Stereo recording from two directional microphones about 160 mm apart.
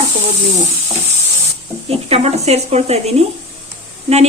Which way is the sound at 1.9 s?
40° right (ahead or behind).